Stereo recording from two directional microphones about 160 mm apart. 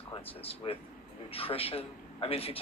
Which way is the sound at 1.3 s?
35° left (ahead or behind).